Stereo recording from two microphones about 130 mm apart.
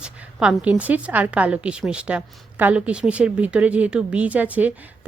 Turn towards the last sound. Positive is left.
turn(degrees=-10)  # may be behind; listen again after turning